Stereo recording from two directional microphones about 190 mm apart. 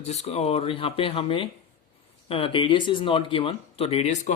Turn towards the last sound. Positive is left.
turn(degrees=35)  # may be behind; listen again after turning